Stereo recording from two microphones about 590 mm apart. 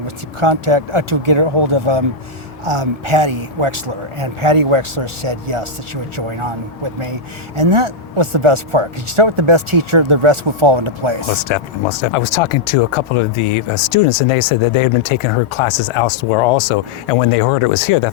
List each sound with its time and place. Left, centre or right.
0.3 s a man's voice: right
11.4 s speech: left